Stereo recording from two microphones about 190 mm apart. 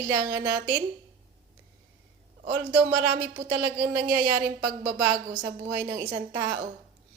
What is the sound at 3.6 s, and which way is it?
Speech, 20° right (ahead or behind).